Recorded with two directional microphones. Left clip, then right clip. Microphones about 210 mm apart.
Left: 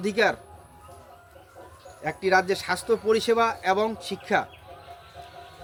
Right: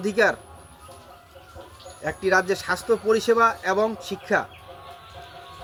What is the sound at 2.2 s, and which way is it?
Speech, 5° left (ahead or behind).